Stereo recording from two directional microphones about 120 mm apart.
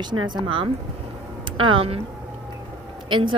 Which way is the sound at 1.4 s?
45° right (ahead or behind).